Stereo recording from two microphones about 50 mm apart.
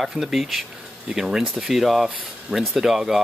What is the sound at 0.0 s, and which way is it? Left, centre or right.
Speech, centre.